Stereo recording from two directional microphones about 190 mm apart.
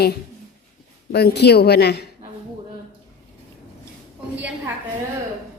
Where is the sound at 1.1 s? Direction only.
60° left (ahead or behind).